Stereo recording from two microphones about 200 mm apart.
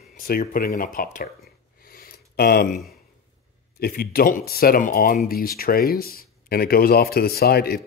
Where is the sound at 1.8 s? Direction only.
45° left (ahead or behind).